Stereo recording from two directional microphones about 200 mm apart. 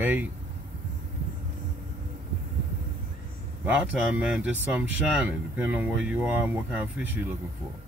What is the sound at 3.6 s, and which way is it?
Speech, 5° right (ahead or behind).